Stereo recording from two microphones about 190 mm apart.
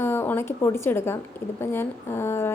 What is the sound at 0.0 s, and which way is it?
A woman's voice, 10° left (ahead or behind).